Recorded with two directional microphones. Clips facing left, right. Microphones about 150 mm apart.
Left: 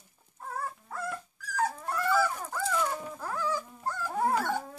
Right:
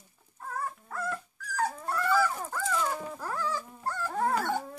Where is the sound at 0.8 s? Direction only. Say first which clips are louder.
Right 2 dB; 15° left (ahead or behind).